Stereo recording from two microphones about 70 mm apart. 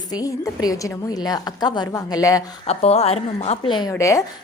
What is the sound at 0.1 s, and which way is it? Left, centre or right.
A woman's voice, left.